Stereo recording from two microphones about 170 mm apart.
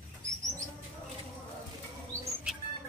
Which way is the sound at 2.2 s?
5° right (ahead or behind).